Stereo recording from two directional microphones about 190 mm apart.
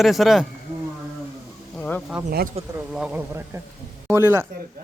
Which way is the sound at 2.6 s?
35° right (ahead or behind).